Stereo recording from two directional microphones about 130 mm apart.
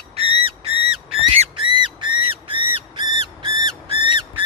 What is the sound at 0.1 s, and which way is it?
Whistle, 50° right (ahead or behind).